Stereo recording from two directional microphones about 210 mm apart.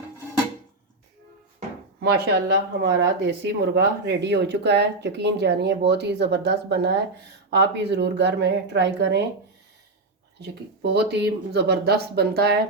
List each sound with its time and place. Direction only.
2.0 s speech: 50° right (ahead or behind)
10.4 s speech: 55° right (ahead or behind)